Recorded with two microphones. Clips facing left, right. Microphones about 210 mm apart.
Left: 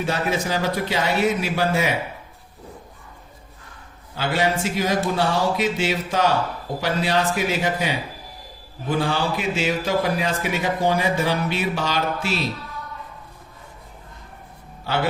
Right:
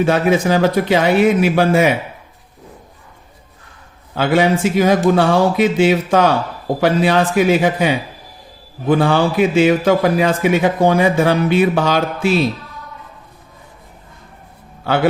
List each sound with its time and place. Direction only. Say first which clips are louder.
0.0 s a man's voice: right 9 dB; 60° right (ahead or behind)
4.1 s a man's voice: right 8 dB; 60° right (ahead or behind)